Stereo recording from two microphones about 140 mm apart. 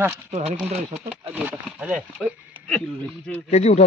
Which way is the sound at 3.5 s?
50° left (ahead or behind).